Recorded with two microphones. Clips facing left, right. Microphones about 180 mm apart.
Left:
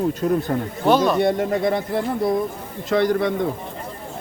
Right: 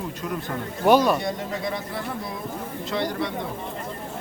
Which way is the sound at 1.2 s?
60° left (ahead or behind).